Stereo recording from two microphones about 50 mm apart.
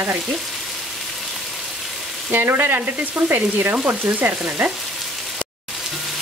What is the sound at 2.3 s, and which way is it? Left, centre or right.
Frying, right.